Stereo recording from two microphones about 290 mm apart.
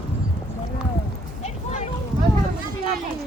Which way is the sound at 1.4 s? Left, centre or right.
Left.